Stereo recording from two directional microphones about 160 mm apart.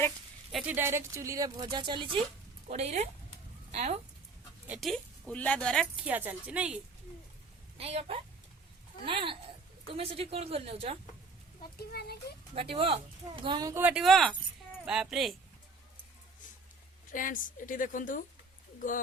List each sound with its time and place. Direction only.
0.7 s speech: 15° right (ahead or behind)
2.6 s speech: 40° right (ahead or behind)
4.6 s speech: 5° right (ahead or behind)
5.3 s speech: 10° left (ahead or behind)
6.1 s speech: 10° right (ahead or behind)
7.8 s speech: 40° right (ahead or behind)
11.8 s a child's voice: 75° left (ahead or behind)
12.5 s speech: 35° right (ahead or behind)
13.8 s speech: centre (ahead or behind)
17.1 s a woman's voice: 55° left (ahead or behind)